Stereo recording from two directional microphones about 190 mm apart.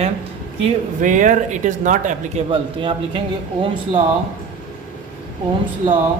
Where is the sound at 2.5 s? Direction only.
25° right (ahead or behind).